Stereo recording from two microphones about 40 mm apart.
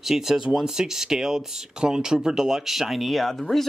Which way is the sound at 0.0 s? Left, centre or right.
Centre.